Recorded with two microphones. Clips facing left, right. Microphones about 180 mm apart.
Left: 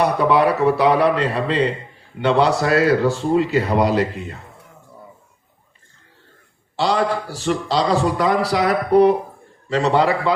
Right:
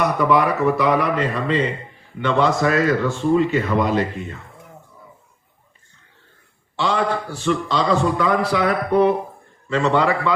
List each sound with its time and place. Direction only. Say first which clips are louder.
0.0 s a man's voice: left 2 dB; 30° left (ahead or behind)
6.7 s a man's voice: left 2 dB; 40° left (ahead or behind)